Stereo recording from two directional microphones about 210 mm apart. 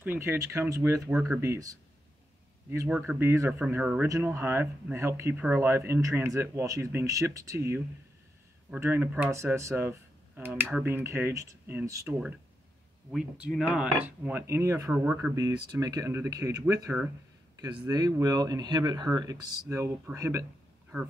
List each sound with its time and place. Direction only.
0.0 s speech: 10° right (ahead or behind)
13.1 s speech: centre (ahead or behind)